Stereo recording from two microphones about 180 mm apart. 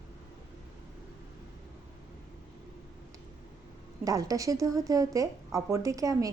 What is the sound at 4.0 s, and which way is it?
A woman's voice, 20° right (ahead or behind).